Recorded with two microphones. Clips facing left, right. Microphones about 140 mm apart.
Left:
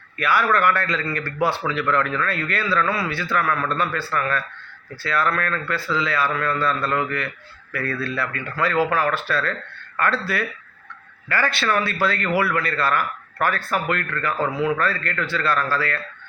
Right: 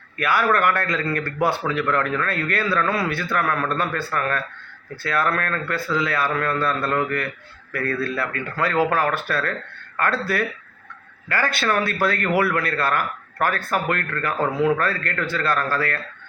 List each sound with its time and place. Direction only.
0.2 s a man's voice: 50° right (ahead or behind)